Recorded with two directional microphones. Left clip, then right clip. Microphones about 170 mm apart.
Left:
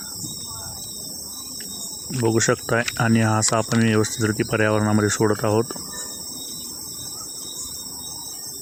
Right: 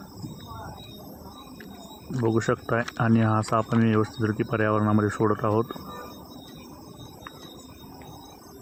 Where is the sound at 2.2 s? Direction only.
20° left (ahead or behind).